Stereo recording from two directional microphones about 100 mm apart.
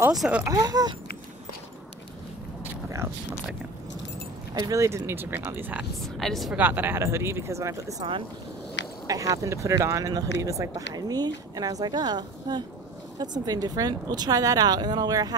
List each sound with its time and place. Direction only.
0.5 s speech: 40° right (ahead or behind)
4.6 s speech: 35° right (ahead or behind); by 5.9 s 20° right (ahead or behind)
6.0 s a woman's voice: 5° left (ahead or behind)
6.5 s speech: 20° right (ahead or behind)
8.0 s speech: 50° right (ahead or behind)
9.0 s speech: 35° right (ahead or behind)